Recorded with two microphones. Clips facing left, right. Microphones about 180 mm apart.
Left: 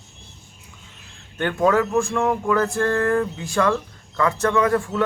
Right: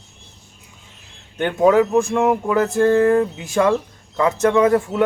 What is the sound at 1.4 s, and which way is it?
Speech, 20° right (ahead or behind).